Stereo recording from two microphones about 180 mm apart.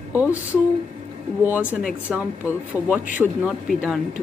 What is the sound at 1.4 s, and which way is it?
Speech, 10° right (ahead or behind).